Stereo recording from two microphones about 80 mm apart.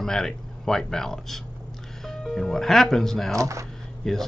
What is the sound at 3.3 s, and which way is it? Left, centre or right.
Speech, right.